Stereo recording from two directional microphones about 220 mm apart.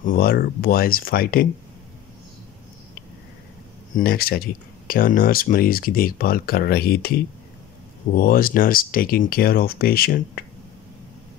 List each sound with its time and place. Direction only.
0.0 s speech: 40° left (ahead or behind)
3.9 s speech: 45° left (ahead or behind)